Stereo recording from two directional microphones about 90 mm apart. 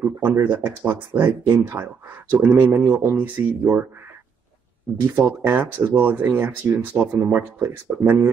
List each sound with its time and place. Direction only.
0.0 s speech: 25° right (ahead or behind)
5.0 s speech: 25° right (ahead or behind)